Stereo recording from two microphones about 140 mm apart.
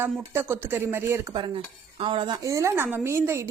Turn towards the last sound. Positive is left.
turn(degrees=-20)  # may be behind; listen again after turning